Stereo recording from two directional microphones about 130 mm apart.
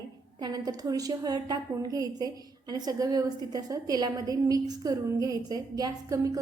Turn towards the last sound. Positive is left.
turn(degrees=-30)  # may be behind; listen again after turning